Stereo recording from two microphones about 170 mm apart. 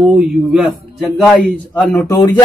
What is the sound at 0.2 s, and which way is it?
A man's voice, 5° right (ahead or behind).